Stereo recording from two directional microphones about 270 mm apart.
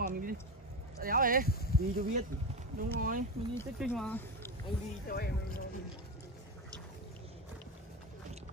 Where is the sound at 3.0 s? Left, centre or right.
Right.